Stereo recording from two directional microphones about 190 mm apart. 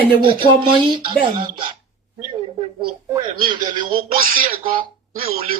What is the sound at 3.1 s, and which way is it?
Speech, 20° right (ahead or behind).